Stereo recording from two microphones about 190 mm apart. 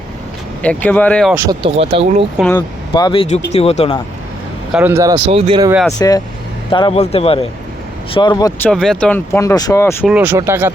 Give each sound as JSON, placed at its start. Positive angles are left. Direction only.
{"t": 0.6, "sound": "speech", "side_deg": 10}
{"t": 1.5, "sound": "speech", "side_deg": -30}
{"t": 2.6, "sound": "speech", "side_deg": 25}
{"t": 4.7, "sound": "speech", "side_deg": -10}
{"t": 5.1, "sound": "speech", "side_deg": -30}
{"t": 6.0, "sound": "speech", "side_deg": 20}
{"t": 10.1, "sound": "speech", "side_deg": -10}